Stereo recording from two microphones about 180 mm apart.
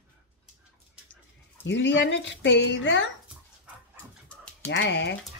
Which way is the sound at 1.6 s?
85° left.